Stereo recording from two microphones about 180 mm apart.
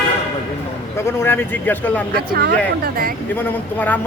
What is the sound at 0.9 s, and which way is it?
Speech, 15° left (ahead or behind).